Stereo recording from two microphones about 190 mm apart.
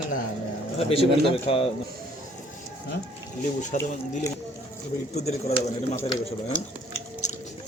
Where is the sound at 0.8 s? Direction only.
30° left (ahead or behind).